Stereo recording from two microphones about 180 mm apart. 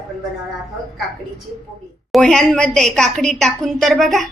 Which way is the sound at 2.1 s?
5° left (ahead or behind).